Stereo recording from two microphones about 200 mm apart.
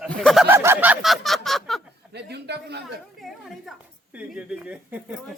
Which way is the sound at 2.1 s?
55° right (ahead or behind).